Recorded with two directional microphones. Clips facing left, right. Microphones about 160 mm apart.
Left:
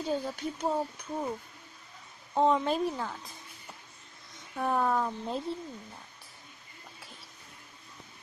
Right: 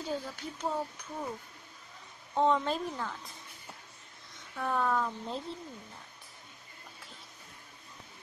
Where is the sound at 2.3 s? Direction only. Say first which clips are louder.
Left 2 dB; 10° left (ahead or behind).